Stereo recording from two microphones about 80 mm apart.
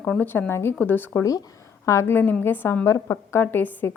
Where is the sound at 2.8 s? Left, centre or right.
Left.